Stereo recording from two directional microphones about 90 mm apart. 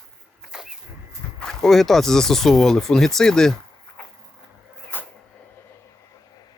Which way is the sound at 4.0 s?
15° left (ahead or behind).